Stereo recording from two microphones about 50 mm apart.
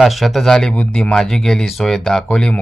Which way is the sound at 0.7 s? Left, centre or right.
Left.